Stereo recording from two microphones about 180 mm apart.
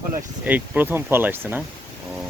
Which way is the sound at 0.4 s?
10° right (ahead or behind).